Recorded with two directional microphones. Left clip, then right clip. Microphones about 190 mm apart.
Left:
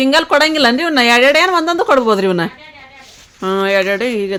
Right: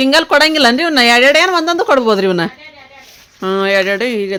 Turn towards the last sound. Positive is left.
turn(degrees=-5)  # may be behind; listen again after turning